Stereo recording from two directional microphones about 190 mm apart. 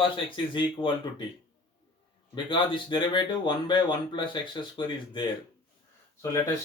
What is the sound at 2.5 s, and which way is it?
Speech, 25° left (ahead or behind).